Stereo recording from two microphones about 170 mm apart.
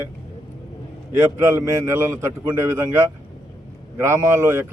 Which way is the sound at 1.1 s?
15° right (ahead or behind).